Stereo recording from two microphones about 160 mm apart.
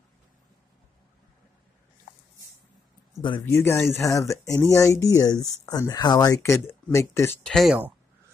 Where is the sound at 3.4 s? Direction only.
15° left (ahead or behind).